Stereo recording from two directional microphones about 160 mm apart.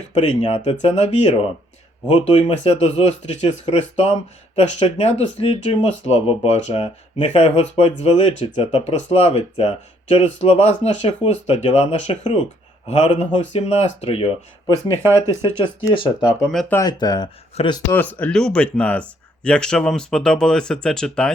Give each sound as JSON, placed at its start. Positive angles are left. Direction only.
{"t": 0.1, "sound": "speech", "side_deg": 35}
{"t": 15.9, "sound": "speech", "side_deg": 30}
{"t": 16.5, "sound": "speech", "side_deg": 5}
{"t": 16.7, "sound": "speech", "side_deg": 25}
{"t": 17.5, "sound": "speech", "side_deg": 35}
{"t": 17.9, "sound": "speech", "side_deg": 10}